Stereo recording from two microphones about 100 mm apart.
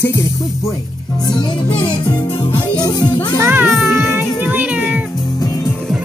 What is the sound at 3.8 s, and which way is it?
Music, 25° right (ahead or behind).